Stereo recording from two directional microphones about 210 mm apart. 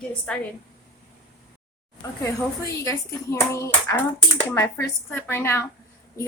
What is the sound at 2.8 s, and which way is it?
Speech, 15° left (ahead or behind).